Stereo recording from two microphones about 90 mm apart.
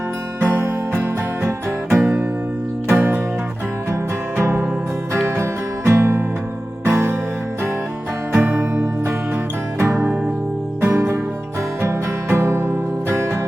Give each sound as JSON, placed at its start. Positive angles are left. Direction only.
{"t": 0.3, "sound": "music", "side_deg": -20}
{"t": 1.9, "sound": "music", "side_deg": -5}
{"t": 2.9, "sound": "music", "side_deg": -20}
{"t": 4.4, "sound": "music", "side_deg": -25}
{"t": 8.3, "sound": "music", "side_deg": -15}
{"t": 10.8, "sound": "music", "side_deg": -20}